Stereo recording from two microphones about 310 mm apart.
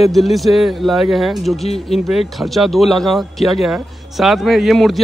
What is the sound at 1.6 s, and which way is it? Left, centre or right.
Speech, centre.